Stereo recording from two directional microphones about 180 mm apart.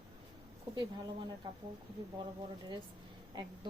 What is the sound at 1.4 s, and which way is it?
Speech, 25° right (ahead or behind).